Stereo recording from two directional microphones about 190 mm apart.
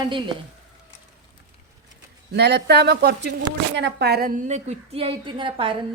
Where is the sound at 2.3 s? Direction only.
60° right (ahead or behind).